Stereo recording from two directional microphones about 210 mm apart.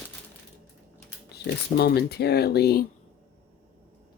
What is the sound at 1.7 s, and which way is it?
Speech, 50° left (ahead or behind).